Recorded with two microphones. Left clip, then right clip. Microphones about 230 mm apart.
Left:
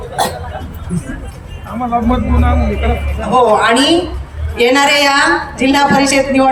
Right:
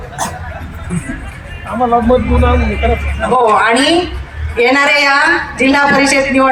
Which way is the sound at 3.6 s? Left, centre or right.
Centre.